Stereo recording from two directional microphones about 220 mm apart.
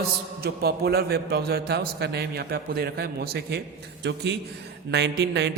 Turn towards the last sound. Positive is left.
turn(degrees=-50)  # may be behind; listen again after turning